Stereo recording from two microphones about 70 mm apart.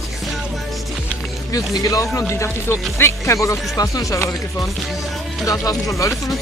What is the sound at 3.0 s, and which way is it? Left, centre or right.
Speech, left.